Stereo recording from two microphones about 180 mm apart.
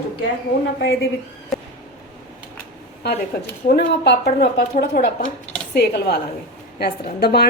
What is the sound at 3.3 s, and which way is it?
Speech, 60° left (ahead or behind).